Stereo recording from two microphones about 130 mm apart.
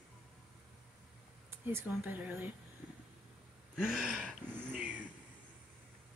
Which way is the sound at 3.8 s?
5° right (ahead or behind).